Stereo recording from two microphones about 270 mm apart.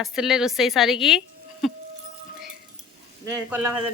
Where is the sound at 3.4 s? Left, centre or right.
Centre.